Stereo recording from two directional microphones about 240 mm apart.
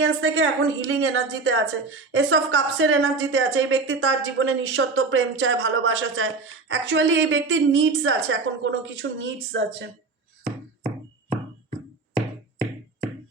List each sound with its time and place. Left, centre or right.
0.0 s a woman's voice: right